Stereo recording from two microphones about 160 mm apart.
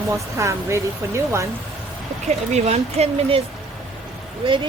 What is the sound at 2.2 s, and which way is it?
A woman's voice, 45° right (ahead or behind).